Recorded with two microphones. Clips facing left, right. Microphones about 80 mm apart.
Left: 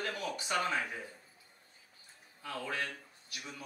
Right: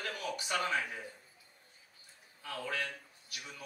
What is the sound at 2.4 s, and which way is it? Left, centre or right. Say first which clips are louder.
Speech: even; left.